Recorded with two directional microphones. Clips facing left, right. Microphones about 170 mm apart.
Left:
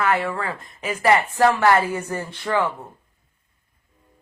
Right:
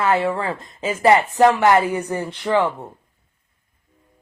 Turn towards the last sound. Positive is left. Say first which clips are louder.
# right 4 dB
turn(degrees=-15)  # may be behind; listen again after turning